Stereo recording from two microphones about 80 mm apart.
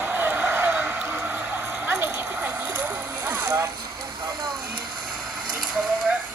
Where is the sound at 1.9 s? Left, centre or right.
Right.